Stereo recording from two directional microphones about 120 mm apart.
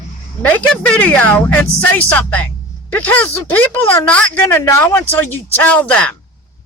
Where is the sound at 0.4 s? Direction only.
10° left (ahead or behind).